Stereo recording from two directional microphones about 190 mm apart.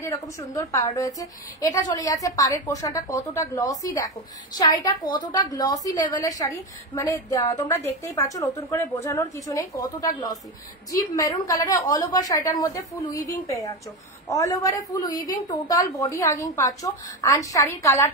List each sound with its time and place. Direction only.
0.0 s a woman's voice: 15° left (ahead or behind)